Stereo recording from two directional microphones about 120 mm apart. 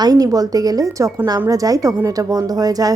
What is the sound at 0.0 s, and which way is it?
A woman's voice, 30° right (ahead or behind).